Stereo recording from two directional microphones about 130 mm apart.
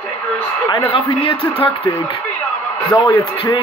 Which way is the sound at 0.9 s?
40° left (ahead or behind).